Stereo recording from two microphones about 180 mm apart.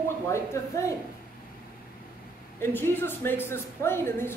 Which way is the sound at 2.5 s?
10° left (ahead or behind).